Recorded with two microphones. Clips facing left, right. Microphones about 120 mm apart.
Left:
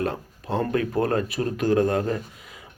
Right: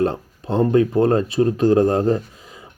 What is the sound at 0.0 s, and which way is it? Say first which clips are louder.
Speech: right 7 dB; 30° right (ahead or behind).